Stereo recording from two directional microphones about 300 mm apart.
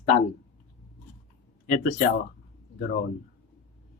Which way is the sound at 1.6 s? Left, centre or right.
Left.